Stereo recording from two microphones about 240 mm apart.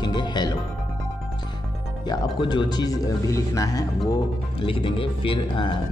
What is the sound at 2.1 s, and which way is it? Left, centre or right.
Speech, centre.